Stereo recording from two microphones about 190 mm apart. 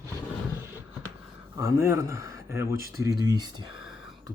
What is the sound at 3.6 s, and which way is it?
Whispering, 90° left.